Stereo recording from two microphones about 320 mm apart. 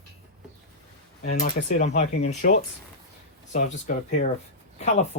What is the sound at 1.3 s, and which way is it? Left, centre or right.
Speech, left.